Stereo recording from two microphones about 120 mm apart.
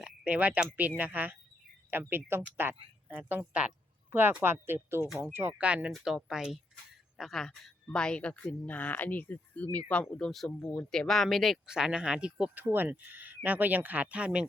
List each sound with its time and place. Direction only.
0.3 s speech: 15° right (ahead or behind)